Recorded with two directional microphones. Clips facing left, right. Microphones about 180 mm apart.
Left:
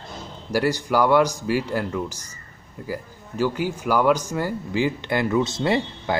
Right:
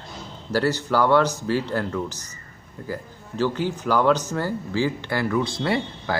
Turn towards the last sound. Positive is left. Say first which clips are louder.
# left 2 dB
turn(degrees=20)  # may be behind; listen again after turning